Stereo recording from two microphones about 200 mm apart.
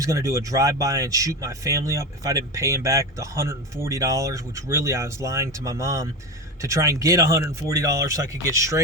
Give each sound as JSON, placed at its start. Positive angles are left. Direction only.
{"t": 0.0, "sound": "speech", "side_deg": -15}